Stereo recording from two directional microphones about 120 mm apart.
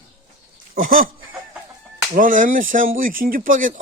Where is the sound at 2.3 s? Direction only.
90° right.